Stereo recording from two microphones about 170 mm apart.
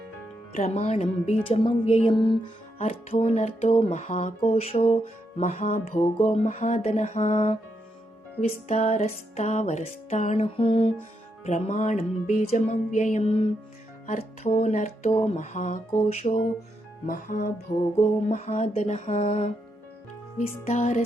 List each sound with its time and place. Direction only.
0.5 s music: 40° left (ahead or behind)
2.8 s music: 40° left (ahead or behind)
17.1 s music: 55° left (ahead or behind)
17.7 s music: 40° left (ahead or behind)